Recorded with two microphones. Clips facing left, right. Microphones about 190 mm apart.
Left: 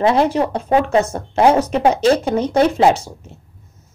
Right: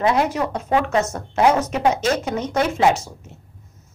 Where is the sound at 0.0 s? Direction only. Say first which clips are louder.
Left 4 dB; 30° left (ahead or behind).